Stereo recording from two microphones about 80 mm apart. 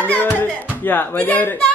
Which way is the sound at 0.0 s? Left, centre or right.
Left.